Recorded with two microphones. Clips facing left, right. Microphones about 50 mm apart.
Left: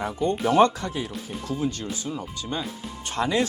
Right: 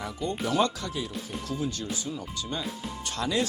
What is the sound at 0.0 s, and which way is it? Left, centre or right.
Speech, left.